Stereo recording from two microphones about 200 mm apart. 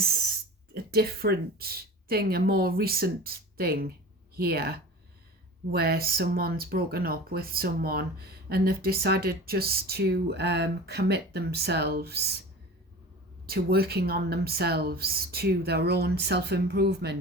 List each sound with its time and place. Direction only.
0.7 s a woman's voice: 50° right (ahead or behind)
13.5 s speech: 50° right (ahead or behind)